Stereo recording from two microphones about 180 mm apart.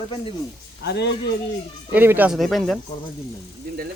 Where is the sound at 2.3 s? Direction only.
Centre (ahead or behind).